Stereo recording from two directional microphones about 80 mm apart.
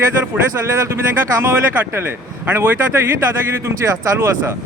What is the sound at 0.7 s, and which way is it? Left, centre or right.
Speech, right.